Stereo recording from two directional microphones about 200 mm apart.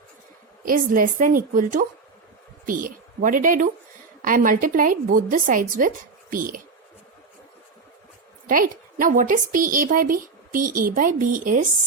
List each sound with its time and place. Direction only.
0.6 s a woman's voice: 45° right (ahead or behind)
8.4 s a woman's voice: 45° right (ahead or behind)